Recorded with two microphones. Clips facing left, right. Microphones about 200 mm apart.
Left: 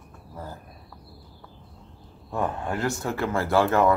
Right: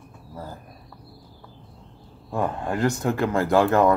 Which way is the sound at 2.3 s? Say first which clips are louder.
Right 2 dB; 15° right (ahead or behind).